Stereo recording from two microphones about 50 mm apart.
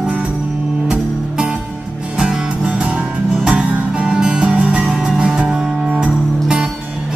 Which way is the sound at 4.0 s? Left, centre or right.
Centre.